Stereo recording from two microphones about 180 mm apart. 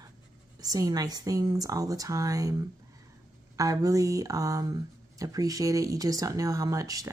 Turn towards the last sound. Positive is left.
turn(degrees=-20)  # may be behind; listen again after turning